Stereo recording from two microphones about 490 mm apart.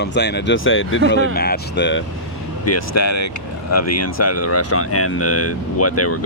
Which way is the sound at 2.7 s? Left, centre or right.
Left.